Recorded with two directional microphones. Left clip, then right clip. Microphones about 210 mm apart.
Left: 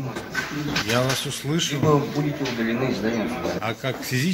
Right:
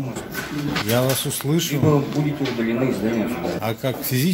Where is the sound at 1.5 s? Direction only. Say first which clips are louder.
Right 2 dB; 30° right (ahead or behind).